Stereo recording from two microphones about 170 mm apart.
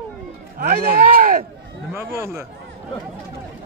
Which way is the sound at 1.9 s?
15° right (ahead or behind).